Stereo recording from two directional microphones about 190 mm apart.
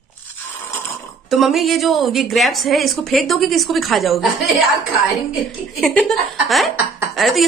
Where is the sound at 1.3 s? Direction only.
Centre (ahead or behind).